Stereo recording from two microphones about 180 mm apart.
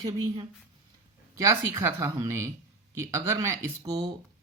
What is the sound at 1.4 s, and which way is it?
Speech, 15° right (ahead or behind).